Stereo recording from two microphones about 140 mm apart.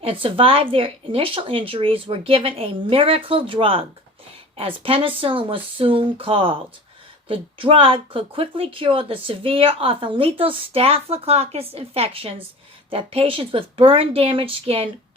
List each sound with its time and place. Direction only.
0.0 s speech: 40° right (ahead or behind)